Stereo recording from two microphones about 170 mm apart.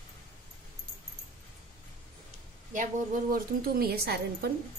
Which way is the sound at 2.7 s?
50° right (ahead or behind).